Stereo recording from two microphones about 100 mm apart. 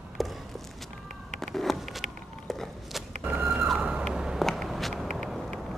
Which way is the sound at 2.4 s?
Centre (ahead or behind).